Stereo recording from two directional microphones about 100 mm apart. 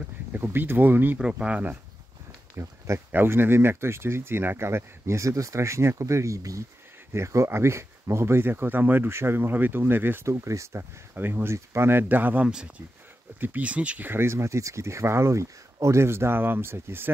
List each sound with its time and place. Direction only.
0.3 s speech: 20° right (ahead or behind)
2.5 s a sound: 30° right (ahead or behind)
3.1 s speech: 20° right (ahead or behind)